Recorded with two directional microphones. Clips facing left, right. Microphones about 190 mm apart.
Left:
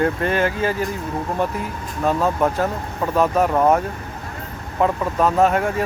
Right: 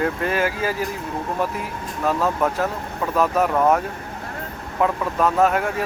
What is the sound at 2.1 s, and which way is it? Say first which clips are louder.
Speech: left 2 dB; 25° left (ahead or behind).